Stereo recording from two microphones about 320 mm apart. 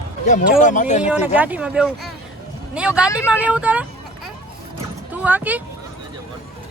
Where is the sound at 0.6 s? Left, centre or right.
Left.